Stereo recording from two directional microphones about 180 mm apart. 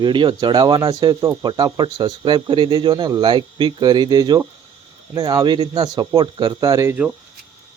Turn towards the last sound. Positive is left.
turn(degrees=-15)  # may be behind; listen again after turning